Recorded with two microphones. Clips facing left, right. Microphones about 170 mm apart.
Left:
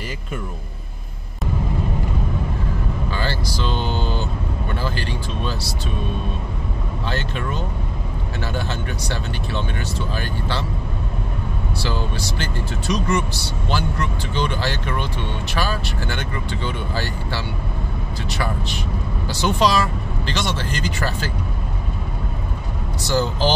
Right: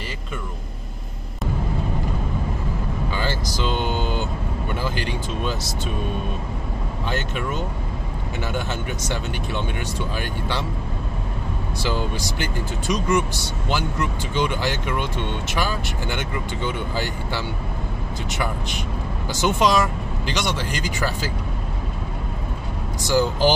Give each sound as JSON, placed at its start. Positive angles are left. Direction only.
{"t": 3.1, "sound": "speech", "side_deg": -15}
{"t": 8.5, "sound": "speech", "side_deg": -15}
{"t": 11.8, "sound": "speech", "side_deg": -15}
{"t": 23.0, "sound": "speech", "side_deg": -15}